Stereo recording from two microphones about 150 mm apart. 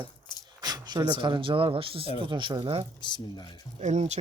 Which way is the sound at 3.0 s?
30° left (ahead or behind).